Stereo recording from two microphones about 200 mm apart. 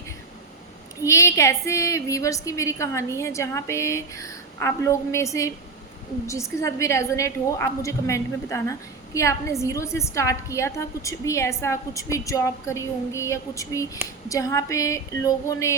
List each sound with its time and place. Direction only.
1.0 s a woman's voice: 15° left (ahead or behind)